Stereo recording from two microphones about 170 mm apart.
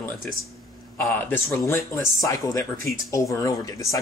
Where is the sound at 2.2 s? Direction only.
20° left (ahead or behind).